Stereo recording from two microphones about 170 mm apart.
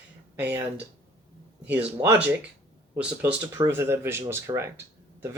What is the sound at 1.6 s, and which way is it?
Speech, 10° right (ahead or behind).